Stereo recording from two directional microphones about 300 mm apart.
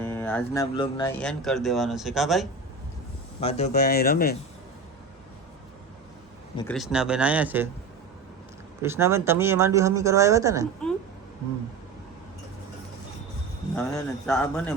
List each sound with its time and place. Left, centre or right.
0.0 s speech: centre
1.2 s speech: centre
3.4 s speech: left
6.6 s speech: centre
8.8 s speech: centre
13.7 s speech: centre